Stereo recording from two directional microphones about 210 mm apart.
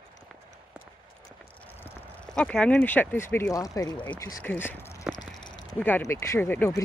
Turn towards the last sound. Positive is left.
turn(degrees=10)  # may be behind; listen again after turning